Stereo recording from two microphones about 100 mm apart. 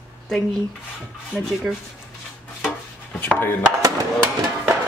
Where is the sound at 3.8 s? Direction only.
35° right (ahead or behind).